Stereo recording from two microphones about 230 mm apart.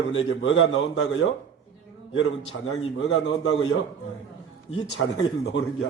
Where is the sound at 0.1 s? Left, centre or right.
Left.